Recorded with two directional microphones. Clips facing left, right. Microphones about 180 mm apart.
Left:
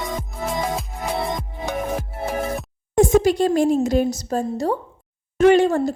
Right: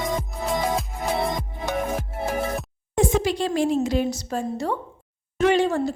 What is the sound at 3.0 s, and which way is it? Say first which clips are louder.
A woman's voice: left 6 dB; 45° left (ahead or behind).